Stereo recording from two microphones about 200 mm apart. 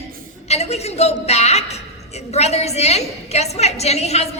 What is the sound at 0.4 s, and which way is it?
A man's voice, 30° left (ahead or behind).